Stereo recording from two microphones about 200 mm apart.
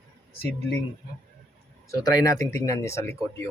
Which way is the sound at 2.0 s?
20° left (ahead or behind).